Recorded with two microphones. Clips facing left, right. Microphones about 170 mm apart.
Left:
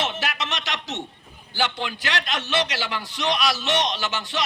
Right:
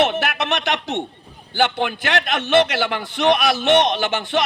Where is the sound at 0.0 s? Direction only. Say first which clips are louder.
Right 8 dB; 55° right (ahead or behind).